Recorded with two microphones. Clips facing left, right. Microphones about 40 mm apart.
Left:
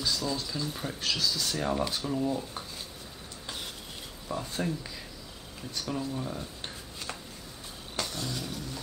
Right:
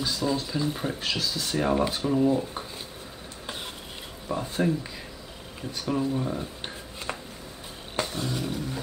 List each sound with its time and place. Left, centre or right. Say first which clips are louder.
0.0 s speech: right 4 dB; right
3.4 s stir: right 3 dB; right
4.3 s speech: right 6 dB; centre
7.9 s roaring cats: right 5 dB; right